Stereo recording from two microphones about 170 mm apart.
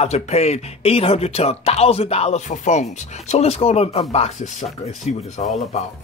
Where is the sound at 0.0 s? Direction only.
40° left (ahead or behind).